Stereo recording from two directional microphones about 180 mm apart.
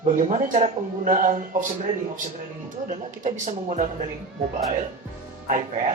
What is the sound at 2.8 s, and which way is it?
Speech, 45° right (ahead or behind).